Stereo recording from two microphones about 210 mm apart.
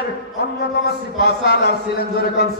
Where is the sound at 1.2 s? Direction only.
50° left (ahead or behind).